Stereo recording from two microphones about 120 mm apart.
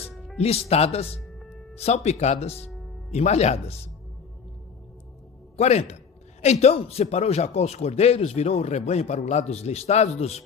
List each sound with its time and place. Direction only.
0.3 s a man's voice: 55° left (ahead or behind)
5.5 s a man's voice: 65° left (ahead or behind)